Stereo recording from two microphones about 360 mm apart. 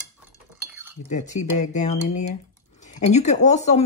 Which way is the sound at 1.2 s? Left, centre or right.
Centre.